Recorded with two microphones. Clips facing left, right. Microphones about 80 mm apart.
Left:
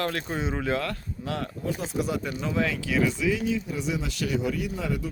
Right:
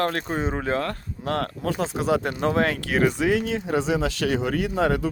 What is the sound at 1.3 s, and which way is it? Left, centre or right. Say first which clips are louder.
Speech: right 5 dB; right.